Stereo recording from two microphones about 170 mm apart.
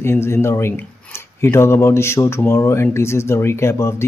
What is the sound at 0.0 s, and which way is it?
Speech, 15° left (ahead or behind).